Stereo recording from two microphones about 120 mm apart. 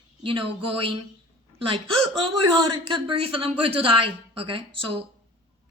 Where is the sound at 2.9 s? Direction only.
50° right (ahead or behind).